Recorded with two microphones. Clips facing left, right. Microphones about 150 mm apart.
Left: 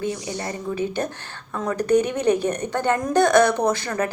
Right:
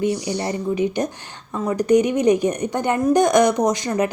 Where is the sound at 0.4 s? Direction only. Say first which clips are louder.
Right 4 dB; 15° right (ahead or behind).